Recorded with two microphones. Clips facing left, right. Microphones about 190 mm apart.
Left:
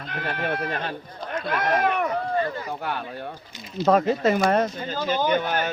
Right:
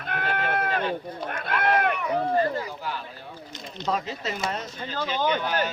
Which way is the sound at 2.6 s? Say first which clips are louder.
Left 4 dB; 60° left (ahead or behind).